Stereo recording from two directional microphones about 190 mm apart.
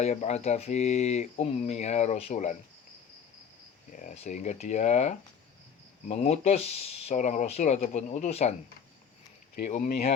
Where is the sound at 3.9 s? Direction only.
40° left (ahead or behind).